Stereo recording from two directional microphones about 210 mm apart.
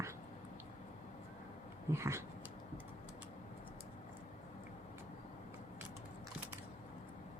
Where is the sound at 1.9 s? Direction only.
15° right (ahead or behind).